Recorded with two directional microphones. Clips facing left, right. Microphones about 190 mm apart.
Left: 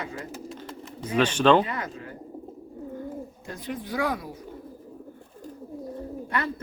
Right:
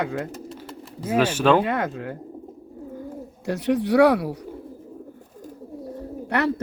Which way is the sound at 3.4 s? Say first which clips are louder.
Right 16 dB; 75° right (ahead or behind).